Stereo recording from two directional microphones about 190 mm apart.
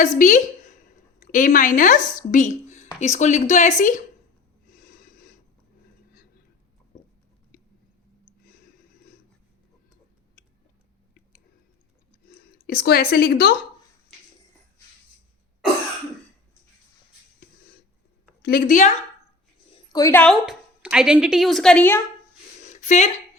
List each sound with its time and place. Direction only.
0.2 s a woman's voice: 40° left (ahead or behind)
4.7 s snort: 45° left (ahead or behind)
12.6 s a woman's voice: 55° left (ahead or behind)
18.4 s a woman's voice: 50° left (ahead or behind)
19.7 s a woman's voice: 20° left (ahead or behind)
22.6 s a sound: 40° left (ahead or behind)